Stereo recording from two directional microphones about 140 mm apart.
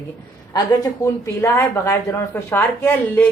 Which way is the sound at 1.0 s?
20° left (ahead or behind).